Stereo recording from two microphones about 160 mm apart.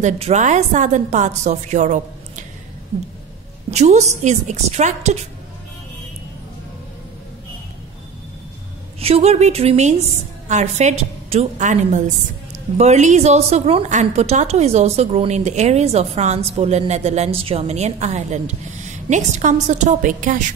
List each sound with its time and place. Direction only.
0.0 s a woman's voice: 45° right (ahead or behind)
3.7 s a woman's voice: 45° right (ahead or behind)
9.0 s a woman's voice: 40° right (ahead or behind)